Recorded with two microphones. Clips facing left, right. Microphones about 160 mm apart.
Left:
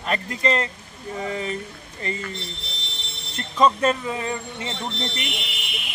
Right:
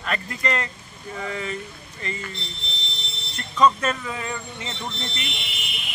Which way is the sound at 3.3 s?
30° left (ahead or behind).